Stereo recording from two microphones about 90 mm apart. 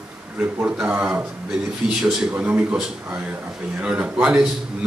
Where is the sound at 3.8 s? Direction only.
15° right (ahead or behind).